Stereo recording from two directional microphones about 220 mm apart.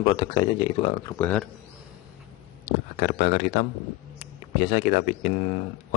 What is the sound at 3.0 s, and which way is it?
Speech, 35° left (ahead or behind).